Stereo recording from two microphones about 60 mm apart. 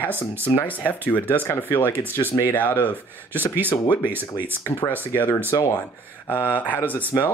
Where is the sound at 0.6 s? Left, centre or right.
Left.